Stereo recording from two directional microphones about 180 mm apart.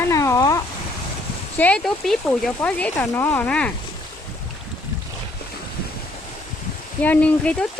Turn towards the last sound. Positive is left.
turn(degrees=5)  # may be behind; listen again after turning